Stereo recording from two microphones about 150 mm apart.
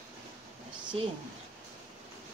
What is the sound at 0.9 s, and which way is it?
Speech, 40° right (ahead or behind).